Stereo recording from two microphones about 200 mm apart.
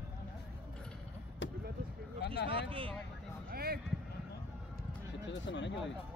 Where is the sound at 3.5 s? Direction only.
50° right (ahead or behind).